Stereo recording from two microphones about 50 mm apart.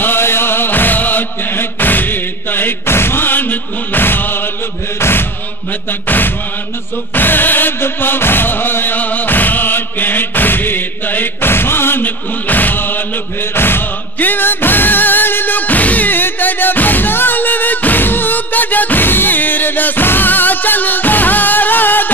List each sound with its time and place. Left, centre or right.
0.0 s chant: left
6.0 s music: left